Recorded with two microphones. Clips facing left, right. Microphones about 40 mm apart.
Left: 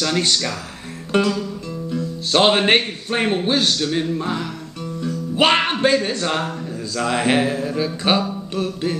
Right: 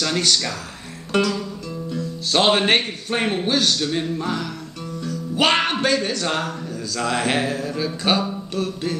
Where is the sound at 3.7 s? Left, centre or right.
Centre.